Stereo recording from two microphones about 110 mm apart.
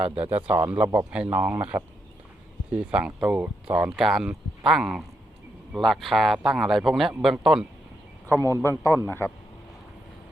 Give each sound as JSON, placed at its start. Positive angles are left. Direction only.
{"t": 0.2, "sound": "speech", "side_deg": -15}
{"t": 8.4, "sound": "a man's voice", "side_deg": -30}
{"t": 9.0, "sound": "a man's voice", "side_deg": 20}